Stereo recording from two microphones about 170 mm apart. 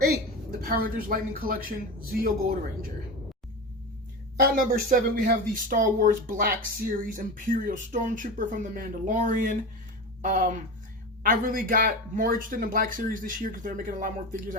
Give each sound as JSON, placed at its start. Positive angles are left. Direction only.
{"t": 0.6, "sound": "a woman's voice", "side_deg": -60}
{"t": 4.4, "sound": "speech", "side_deg": -60}